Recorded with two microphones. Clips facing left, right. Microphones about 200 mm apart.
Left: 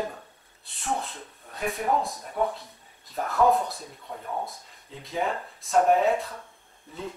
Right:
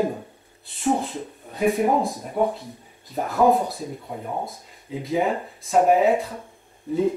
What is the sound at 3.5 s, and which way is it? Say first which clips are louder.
Speech: right 4 dB; centre (ahead or behind).